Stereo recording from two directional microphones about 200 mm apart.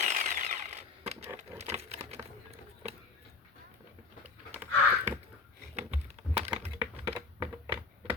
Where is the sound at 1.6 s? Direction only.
35° right (ahead or behind).